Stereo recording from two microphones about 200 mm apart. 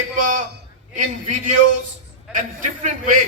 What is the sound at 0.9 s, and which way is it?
A man's voice, 40° right (ahead or behind).